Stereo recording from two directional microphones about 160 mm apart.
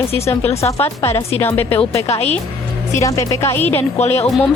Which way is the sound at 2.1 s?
40° left (ahead or behind).